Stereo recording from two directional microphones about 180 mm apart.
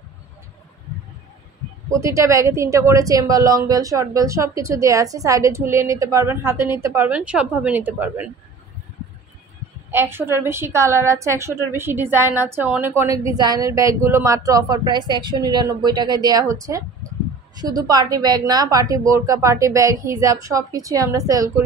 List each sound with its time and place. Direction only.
1.9 s a woman's voice: 15° right (ahead or behind)
9.8 s a woman's voice: 10° right (ahead or behind)